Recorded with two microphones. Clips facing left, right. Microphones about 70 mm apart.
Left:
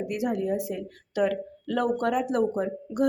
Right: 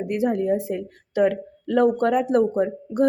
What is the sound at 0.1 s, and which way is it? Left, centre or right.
A woman's voice, right.